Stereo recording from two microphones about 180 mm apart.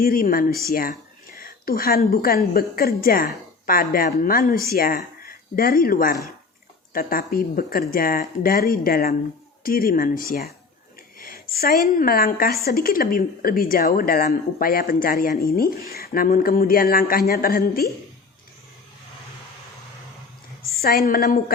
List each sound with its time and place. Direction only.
0.0 s a woman's voice: 50° left (ahead or behind)
20.8 s speech: 55° left (ahead or behind)